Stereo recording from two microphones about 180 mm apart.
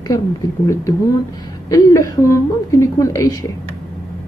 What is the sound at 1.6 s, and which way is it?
Speech, 15° left (ahead or behind).